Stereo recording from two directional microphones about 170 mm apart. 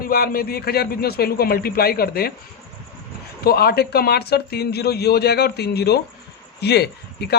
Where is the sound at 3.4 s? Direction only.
65° left (ahead or behind).